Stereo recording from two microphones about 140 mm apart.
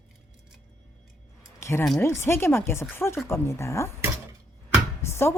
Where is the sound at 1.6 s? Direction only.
20° left (ahead or behind).